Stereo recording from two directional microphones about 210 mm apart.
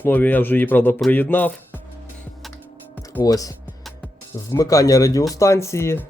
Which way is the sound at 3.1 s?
15° left (ahead or behind).